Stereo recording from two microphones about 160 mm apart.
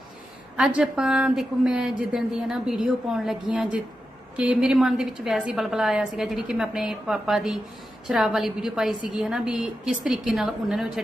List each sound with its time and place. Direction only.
0.5 s a woman's voice: 5° right (ahead or behind)